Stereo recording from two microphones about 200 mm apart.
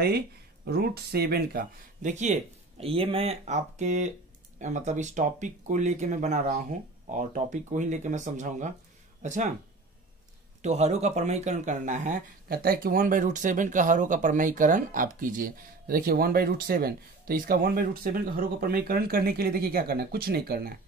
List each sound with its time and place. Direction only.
0.7 s speech: 50° right (ahead or behind)
10.6 s speech: 35° right (ahead or behind); by 20.7 s 50° right (ahead or behind)